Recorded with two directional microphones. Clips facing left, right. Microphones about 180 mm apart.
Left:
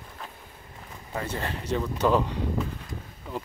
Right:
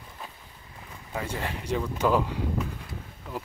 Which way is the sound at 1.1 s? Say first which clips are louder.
Left 1 dB; 10° right (ahead or behind).